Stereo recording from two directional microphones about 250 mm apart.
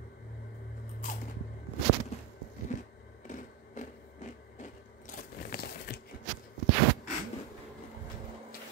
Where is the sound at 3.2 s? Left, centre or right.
Left.